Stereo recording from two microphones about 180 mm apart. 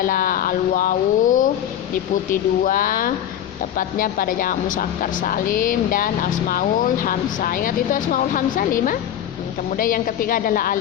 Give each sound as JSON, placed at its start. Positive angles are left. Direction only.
{"t": 0.0, "sound": "speech", "side_deg": 50}